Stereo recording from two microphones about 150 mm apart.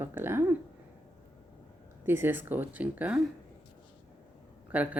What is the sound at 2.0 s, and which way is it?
Speech, 15° right (ahead or behind).